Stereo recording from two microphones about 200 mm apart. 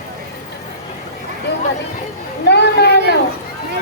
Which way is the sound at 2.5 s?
55° left (ahead or behind).